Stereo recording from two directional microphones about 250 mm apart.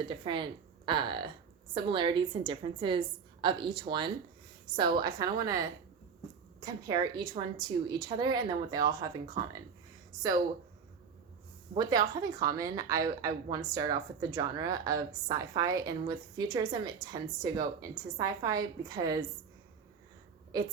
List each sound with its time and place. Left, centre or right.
0.0 s a woman's voice: centre
11.7 s a woman's voice: centre